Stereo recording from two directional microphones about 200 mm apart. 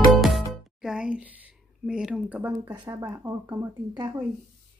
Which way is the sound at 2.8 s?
15° right (ahead or behind).